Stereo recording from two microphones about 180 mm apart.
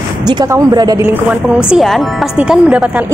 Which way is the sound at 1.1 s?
5° right (ahead or behind).